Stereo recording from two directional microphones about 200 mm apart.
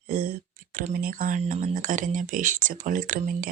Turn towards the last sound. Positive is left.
turn(degrees=-40)  # may be behind; listen again after turning